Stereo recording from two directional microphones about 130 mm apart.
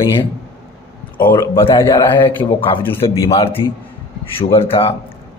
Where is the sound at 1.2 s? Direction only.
40° left (ahead or behind).